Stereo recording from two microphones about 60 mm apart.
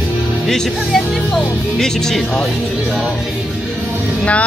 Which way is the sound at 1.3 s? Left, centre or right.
Centre.